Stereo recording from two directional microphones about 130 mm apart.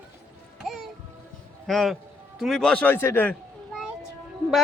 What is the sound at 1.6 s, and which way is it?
A man's voice, centre (ahead or behind).